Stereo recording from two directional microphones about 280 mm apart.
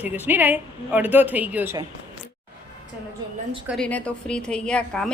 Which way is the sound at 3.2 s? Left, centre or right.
Centre.